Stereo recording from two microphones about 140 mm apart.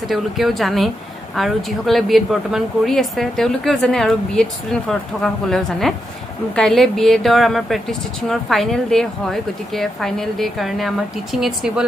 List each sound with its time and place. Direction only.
0.1 s a woman's voice: centre (ahead or behind)